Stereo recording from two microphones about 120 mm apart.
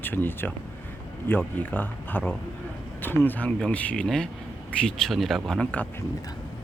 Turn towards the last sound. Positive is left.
turn(degrees=10)  # may be behind; listen again after turning